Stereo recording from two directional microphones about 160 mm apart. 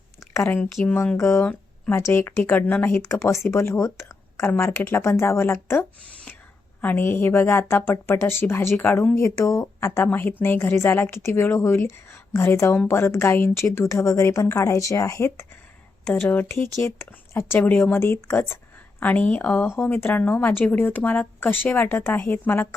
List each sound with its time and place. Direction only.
0.3 s speech: 10° left (ahead or behind)
6.8 s speech: 15° left (ahead or behind)